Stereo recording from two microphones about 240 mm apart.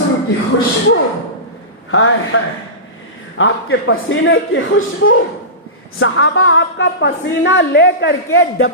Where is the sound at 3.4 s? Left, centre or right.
Left.